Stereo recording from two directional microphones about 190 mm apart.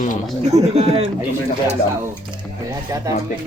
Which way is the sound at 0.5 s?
35° right (ahead or behind).